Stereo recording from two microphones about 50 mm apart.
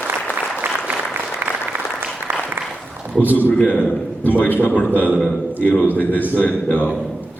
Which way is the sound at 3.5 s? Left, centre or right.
Left.